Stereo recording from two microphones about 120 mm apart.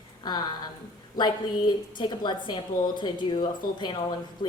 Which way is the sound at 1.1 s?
40° left (ahead or behind).